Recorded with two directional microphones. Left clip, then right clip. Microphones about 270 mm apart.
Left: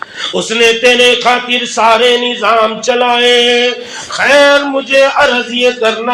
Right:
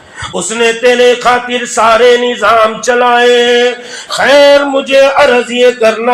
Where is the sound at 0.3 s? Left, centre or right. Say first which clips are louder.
Left 1 dB; right.